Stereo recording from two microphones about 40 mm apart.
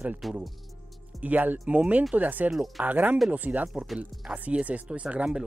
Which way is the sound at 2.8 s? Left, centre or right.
Right.